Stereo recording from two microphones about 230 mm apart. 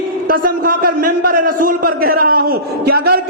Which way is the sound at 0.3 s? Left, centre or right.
Right.